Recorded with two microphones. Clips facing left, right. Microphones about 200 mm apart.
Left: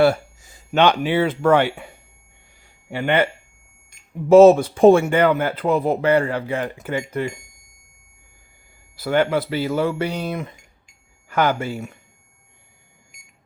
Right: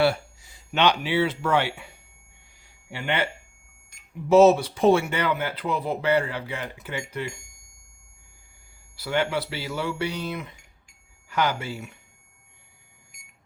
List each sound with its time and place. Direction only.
0.0 s speech: 45° left (ahead or behind)
4.3 s speech: 50° left (ahead or behind)
9.0 s speech: 50° left (ahead or behind)